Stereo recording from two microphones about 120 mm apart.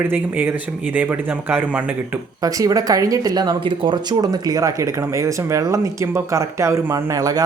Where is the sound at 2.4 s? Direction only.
30° right (ahead or behind).